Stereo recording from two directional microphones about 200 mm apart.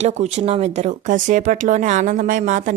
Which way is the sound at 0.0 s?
35° right (ahead or behind).